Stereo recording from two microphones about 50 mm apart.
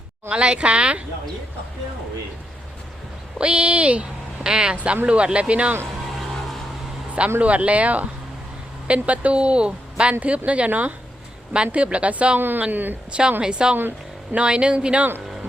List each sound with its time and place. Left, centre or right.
0.3 s speech: right
3.3 s speech: right
7.3 s speech: right
11.5 s speech: right
12.4 s speech: right
13.1 s a woman's voice: centre